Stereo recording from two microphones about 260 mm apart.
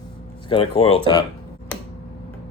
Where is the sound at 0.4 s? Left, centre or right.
Centre.